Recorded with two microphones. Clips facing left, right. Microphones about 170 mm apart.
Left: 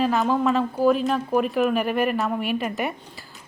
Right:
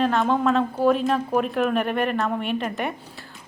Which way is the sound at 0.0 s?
5° left (ahead or behind).